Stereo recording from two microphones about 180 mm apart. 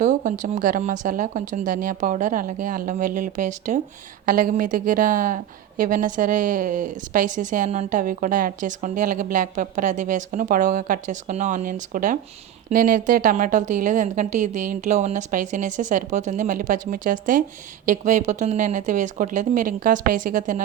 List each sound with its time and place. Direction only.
0.0 s a woman's voice: 45° right (ahead or behind)